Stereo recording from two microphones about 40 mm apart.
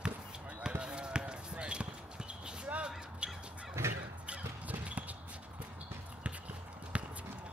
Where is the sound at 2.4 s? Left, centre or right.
Right.